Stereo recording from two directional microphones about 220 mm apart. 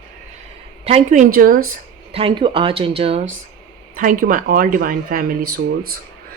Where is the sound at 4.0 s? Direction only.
35° right (ahead or behind).